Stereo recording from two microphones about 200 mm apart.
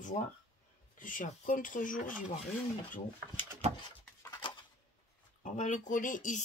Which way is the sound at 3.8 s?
25° left (ahead or behind).